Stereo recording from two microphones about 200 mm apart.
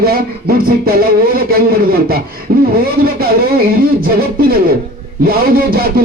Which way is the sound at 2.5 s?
50° right (ahead or behind).